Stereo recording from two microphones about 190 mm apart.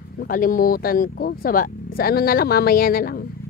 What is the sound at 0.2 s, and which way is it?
Speech, 45° left (ahead or behind).